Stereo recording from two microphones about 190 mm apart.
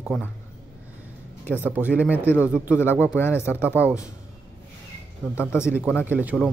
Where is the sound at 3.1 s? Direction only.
10° left (ahead or behind).